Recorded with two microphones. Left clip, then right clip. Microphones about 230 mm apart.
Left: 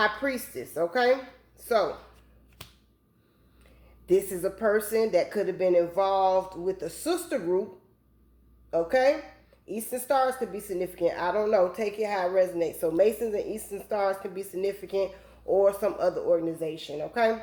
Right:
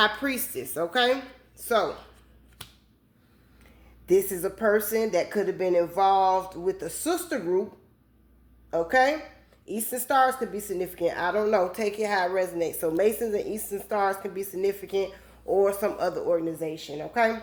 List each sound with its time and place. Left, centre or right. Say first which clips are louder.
0.0 s a woman's voice: right 2 dB; right
4.1 s a woman's voice: right 2 dB; right
8.7 s a woman's voice: right 1 dB; right